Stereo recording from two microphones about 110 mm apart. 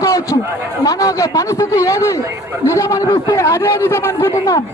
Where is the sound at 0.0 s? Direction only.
30° left (ahead or behind).